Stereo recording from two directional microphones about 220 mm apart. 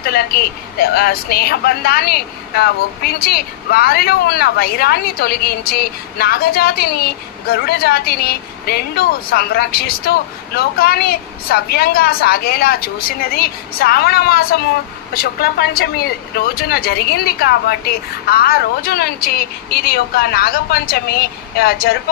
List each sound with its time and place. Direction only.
0.0 s a woman's voice: 45° left (ahead or behind)